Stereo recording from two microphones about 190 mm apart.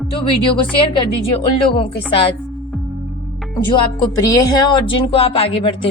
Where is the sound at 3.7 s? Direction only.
20° left (ahead or behind).